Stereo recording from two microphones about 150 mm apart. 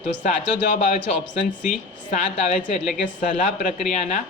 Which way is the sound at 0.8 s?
55° left (ahead or behind).